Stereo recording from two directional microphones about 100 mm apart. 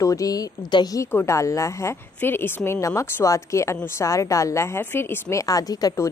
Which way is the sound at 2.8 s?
30° left (ahead or behind).